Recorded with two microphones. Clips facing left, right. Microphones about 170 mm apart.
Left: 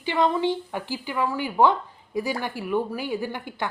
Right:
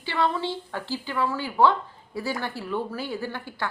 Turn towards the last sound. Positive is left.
turn(degrees=15)  # may be behind; listen again after turning